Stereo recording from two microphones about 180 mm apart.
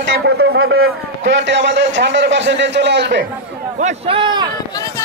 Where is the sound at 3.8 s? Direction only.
30° right (ahead or behind).